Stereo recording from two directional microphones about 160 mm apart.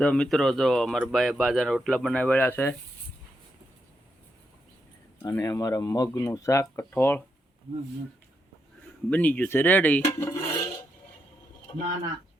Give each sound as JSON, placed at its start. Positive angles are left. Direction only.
{"t": 0.0, "sound": "speech", "side_deg": 5}
{"t": 5.2, "sound": "speech", "side_deg": 20}
{"t": 9.0, "sound": "speech", "side_deg": 10}
{"t": 10.0, "sound": "filing", "side_deg": 20}